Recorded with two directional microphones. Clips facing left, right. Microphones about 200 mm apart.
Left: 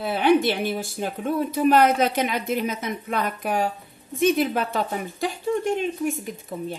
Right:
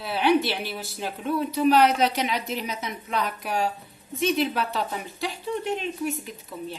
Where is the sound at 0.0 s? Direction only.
50° left (ahead or behind).